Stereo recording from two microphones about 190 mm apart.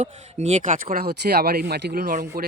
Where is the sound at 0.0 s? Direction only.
40° right (ahead or behind).